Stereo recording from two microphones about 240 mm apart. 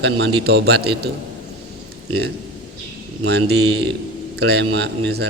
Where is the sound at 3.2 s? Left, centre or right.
Right.